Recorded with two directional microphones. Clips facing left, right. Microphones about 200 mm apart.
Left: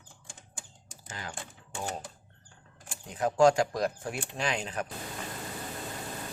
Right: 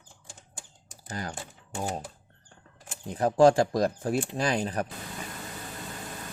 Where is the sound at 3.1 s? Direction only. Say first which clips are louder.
Right 3 dB; 35° right (ahead or behind).